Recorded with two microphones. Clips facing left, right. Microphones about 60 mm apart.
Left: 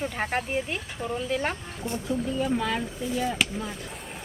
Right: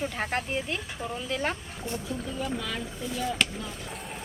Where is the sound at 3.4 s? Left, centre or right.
Centre.